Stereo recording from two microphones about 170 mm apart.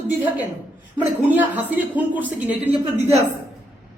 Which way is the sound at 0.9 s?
10° right (ahead or behind).